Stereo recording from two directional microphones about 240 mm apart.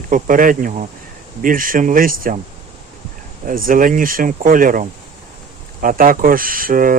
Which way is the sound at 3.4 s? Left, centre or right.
Right.